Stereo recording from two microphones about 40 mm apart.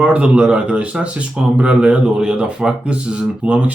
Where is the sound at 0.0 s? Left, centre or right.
Right.